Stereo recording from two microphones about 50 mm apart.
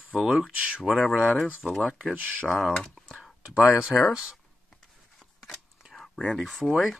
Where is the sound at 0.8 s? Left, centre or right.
Centre.